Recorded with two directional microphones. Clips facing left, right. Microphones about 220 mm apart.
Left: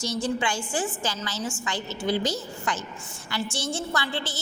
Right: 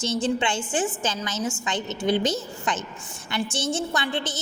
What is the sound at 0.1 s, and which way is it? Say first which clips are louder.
A woman's voice: right 3 dB; 25° right (ahead or behind).